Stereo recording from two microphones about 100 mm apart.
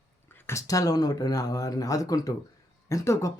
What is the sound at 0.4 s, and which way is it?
A man's voice, 35° left (ahead or behind).